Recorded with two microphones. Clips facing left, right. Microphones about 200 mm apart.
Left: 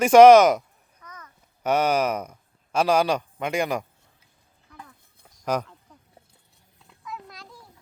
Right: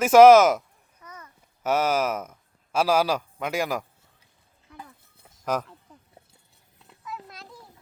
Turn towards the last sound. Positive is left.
turn(degrees=0)  # may be behind; listen again after turning